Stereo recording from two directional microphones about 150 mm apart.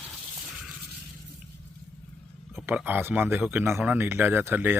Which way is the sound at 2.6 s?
10° right (ahead or behind).